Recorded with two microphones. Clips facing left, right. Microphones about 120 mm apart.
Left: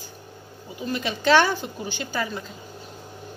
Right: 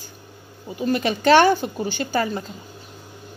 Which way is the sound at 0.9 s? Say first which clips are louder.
Right 4 dB; 60° right (ahead or behind).